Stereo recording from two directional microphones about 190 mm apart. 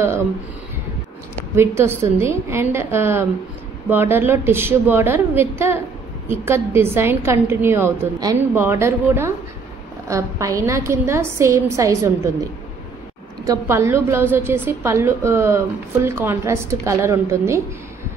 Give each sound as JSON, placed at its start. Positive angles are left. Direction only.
{"t": 1.5, "sound": "a woman's voice", "side_deg": -15}
{"t": 13.5, "sound": "a woman's voice", "side_deg": -15}